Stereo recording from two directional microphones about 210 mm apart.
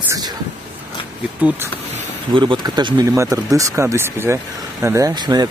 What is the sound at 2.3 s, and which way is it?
Speech, 20° right (ahead or behind).